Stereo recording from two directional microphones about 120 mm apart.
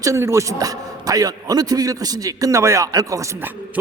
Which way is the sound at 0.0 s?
25° right (ahead or behind).